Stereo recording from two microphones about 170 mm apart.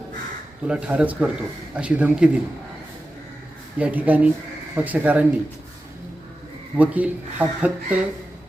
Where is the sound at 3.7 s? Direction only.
10° right (ahead or behind).